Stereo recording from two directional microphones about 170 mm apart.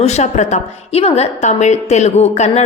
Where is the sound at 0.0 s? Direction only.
40° left (ahead or behind).